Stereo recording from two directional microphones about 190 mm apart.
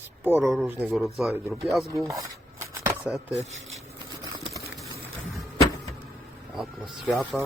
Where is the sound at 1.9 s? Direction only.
15° right (ahead or behind).